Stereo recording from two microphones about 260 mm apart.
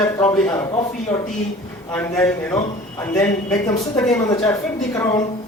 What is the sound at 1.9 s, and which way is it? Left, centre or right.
A man's voice, centre.